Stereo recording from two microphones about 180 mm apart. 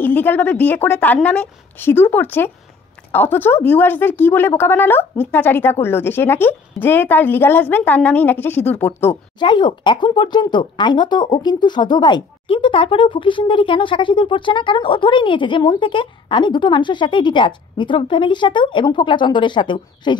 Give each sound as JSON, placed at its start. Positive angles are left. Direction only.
{"t": 0.0, "sound": "a woman's voice", "side_deg": 10}
{"t": 9.4, "sound": "speech", "side_deg": 25}